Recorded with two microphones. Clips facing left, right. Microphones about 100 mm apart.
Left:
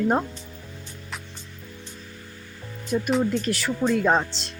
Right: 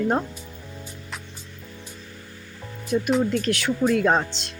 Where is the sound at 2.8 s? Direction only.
Centre (ahead or behind).